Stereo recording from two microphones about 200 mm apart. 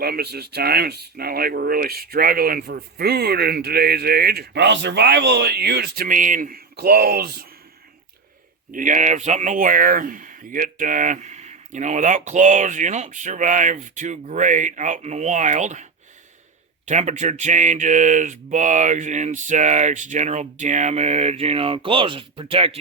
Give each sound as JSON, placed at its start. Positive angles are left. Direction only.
{"t": 0.0, "sound": "speech", "side_deg": -50}
{"t": 8.7, "sound": "speech", "side_deg": -40}